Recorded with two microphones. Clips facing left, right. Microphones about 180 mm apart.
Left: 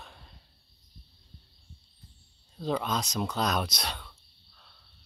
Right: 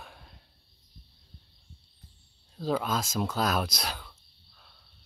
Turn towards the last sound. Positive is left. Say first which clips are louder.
# right 1 dB
turn(degrees=-5)  # may be behind; listen again after turning